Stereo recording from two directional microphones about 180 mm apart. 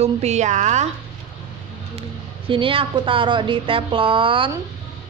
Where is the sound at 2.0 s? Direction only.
30° right (ahead or behind).